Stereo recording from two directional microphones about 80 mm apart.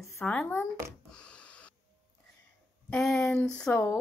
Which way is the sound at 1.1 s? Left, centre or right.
Centre.